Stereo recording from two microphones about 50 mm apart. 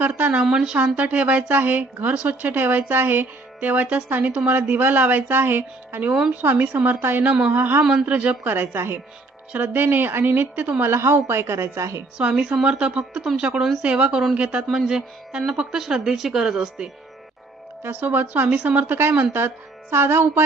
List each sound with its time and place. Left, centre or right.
0.0 s a woman's voice: right
0.4 s speech: centre
0.9 s a woman's voice: right
9.5 s a woman's voice: right
10.8 s a woman's voice: right
12.6 s speech: right
14.7 s speech: centre
18.0 s a woman's voice: right
18.9 s a woman's voice: right